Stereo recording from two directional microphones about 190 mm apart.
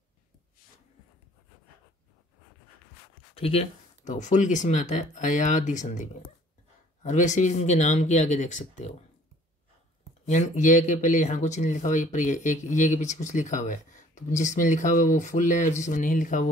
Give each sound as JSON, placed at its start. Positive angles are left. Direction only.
{"t": 3.3, "sound": "speech", "side_deg": 30}
{"t": 10.2, "sound": "speech", "side_deg": 40}